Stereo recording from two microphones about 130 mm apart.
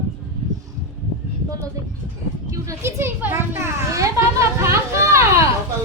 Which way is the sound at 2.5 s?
25° right (ahead or behind).